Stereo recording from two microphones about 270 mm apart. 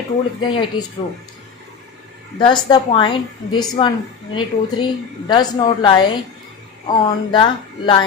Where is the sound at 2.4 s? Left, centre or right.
Centre.